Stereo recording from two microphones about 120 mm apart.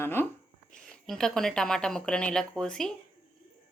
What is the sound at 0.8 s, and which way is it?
A woman's voice, 5° left (ahead or behind).